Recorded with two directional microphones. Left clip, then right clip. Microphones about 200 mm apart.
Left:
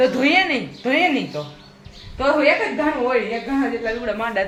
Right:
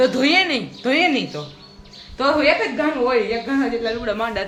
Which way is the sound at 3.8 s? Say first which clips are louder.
Right 1 dB; 15° right (ahead or behind).